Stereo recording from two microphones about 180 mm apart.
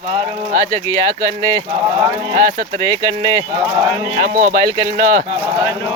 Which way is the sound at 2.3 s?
45° right (ahead or behind).